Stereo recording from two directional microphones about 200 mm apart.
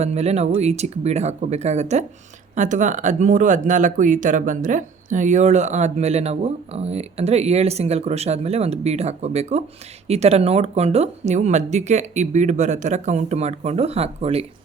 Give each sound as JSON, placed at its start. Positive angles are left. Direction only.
{"t": 0.0, "sound": "speech", "side_deg": -35}